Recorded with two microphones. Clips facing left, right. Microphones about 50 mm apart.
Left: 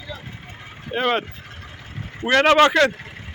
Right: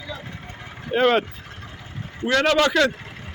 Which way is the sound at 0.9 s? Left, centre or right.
Centre.